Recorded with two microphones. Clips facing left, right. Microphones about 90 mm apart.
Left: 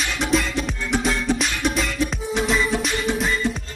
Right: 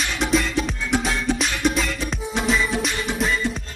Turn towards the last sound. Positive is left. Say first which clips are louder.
# even
turn(degrees=0)  # may be behind; listen again after turning